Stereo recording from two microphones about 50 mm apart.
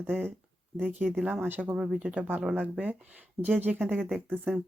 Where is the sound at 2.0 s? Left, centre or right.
Right.